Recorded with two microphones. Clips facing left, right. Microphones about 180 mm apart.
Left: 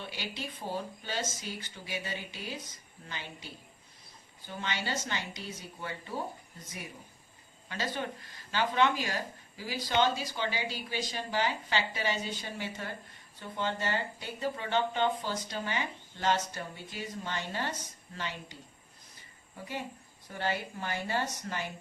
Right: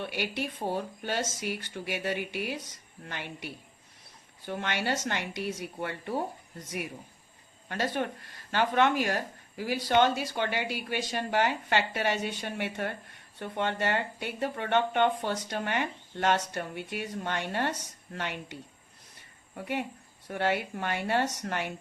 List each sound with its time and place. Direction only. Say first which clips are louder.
0.0 s speech: right 7 dB; 65° right (ahead or behind)
7.7 s speech: right 5 dB; 55° right (ahead or behind)
19.5 s speech: right 6 dB; 65° right (ahead or behind)